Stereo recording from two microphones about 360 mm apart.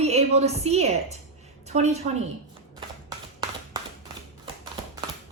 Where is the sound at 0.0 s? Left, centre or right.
Centre.